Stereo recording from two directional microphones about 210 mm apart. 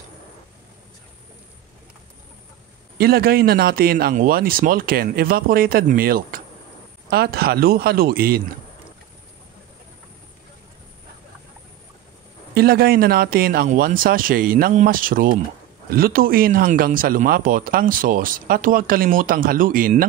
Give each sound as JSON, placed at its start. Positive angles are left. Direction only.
{"t": 3.0, "sound": "speech", "side_deg": -45}
{"t": 12.5, "sound": "speech", "side_deg": -45}